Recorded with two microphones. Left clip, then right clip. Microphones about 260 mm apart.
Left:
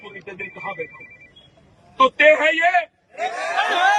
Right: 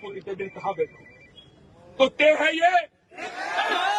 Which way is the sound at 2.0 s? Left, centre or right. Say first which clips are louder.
Left 5 dB; centre.